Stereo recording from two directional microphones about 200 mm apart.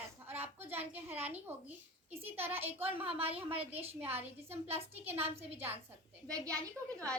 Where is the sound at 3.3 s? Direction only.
30° right (ahead or behind).